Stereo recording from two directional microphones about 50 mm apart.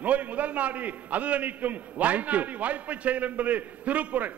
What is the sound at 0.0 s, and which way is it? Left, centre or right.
A man's voice, right.